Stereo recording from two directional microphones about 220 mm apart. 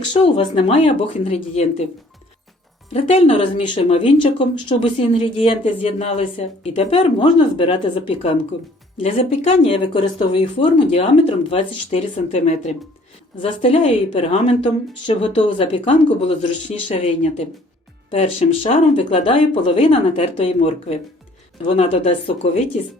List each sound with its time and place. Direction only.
0.1 s speech: 25° left (ahead or behind)
2.9 s speech: 25° left (ahead or behind)